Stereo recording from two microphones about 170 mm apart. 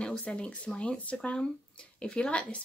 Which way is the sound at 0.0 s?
5° left (ahead or behind).